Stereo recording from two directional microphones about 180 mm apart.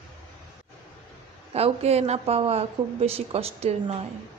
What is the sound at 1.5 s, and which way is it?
A woman's voice, 35° right (ahead or behind).